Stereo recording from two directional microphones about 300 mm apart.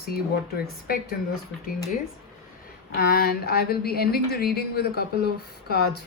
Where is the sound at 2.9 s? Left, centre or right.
Left.